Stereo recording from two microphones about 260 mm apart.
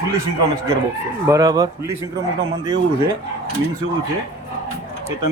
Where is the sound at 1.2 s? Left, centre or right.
Centre.